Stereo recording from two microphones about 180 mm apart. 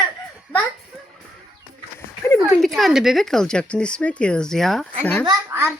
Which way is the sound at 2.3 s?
Centre (ahead or behind).